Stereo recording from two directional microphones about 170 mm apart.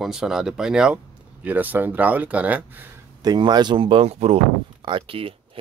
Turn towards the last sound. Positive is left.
turn(degrees=-30)  # may be behind; listen again after turning